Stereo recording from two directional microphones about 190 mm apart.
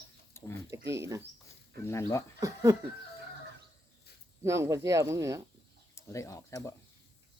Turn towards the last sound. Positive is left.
turn(degrees=15)  # may be behind; listen again after turning